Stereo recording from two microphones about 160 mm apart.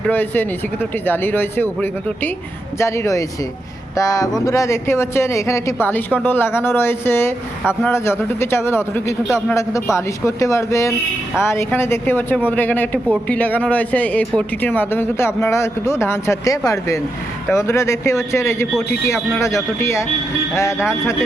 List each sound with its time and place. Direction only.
0.1 s speech: 10° left (ahead or behind)
2.7 s speech: 15° left (ahead or behind)